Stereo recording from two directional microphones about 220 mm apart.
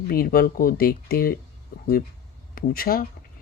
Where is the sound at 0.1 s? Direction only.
40° left (ahead or behind).